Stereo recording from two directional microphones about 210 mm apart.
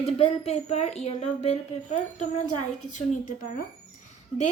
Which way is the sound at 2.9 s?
35° left (ahead or behind).